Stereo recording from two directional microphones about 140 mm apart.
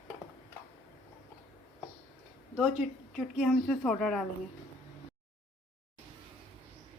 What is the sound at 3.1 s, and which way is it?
A woman's voice, 5° left (ahead or behind).